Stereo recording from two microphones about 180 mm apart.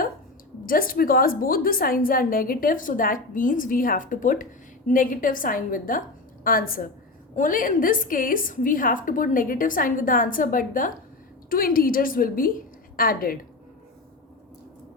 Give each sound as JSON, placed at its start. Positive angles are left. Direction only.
{"t": 0.6, "sound": "a woman's voice", "side_deg": 50}